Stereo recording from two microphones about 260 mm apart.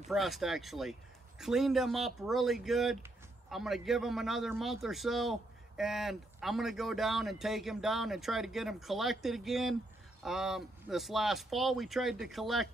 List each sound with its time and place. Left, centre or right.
0.1 s speech: centre